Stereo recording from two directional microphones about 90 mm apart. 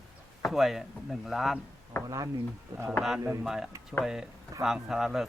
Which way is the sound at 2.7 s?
35° right (ahead or behind).